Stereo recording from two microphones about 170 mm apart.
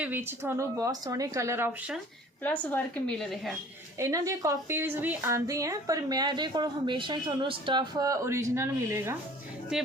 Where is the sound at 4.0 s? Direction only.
20° right (ahead or behind).